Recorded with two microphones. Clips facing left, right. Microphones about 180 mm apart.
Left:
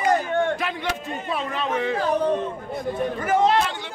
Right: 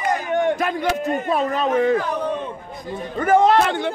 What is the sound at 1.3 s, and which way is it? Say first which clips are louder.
Speech: right 5 dB; 40° right (ahead or behind).